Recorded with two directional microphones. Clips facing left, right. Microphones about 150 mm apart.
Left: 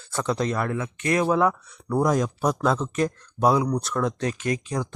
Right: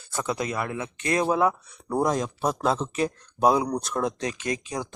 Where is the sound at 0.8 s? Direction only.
25° right (ahead or behind).